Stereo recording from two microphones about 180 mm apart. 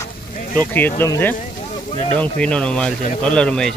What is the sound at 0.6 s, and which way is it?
Speech, 10° left (ahead or behind).